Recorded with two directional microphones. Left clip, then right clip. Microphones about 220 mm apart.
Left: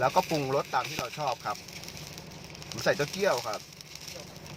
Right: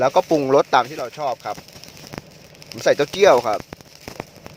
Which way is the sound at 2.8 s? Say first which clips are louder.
Right 13 dB; 35° right (ahead or behind).